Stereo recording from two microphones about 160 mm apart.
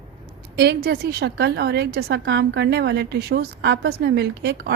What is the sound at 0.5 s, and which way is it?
A woman's voice, 85° right.